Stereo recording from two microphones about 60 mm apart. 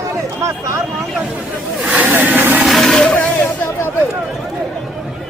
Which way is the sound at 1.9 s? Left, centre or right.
Right.